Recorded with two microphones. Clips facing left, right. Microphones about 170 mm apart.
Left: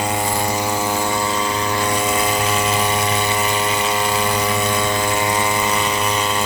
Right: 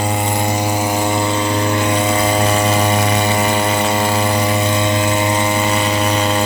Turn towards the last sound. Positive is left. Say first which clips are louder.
# right 4 dB
turn(degrees=-35)  # may be behind; listen again after turning